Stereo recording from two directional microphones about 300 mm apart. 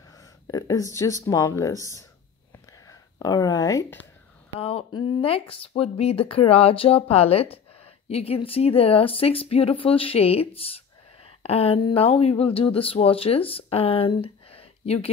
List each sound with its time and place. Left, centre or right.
0.1 s speech: centre